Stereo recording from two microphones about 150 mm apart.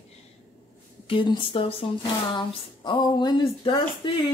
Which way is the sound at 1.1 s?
35° left (ahead or behind).